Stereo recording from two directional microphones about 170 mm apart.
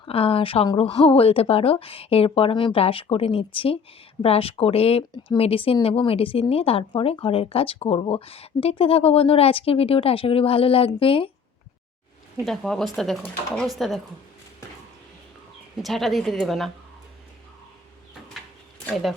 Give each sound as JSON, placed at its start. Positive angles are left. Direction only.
{"t": 0.0, "sound": "speech", "side_deg": 35}
{"t": 12.5, "sound": "a woman's voice", "side_deg": 0}
{"t": 15.8, "sound": "a woman's voice", "side_deg": 0}
{"t": 18.9, "sound": "a woman's voice", "side_deg": 0}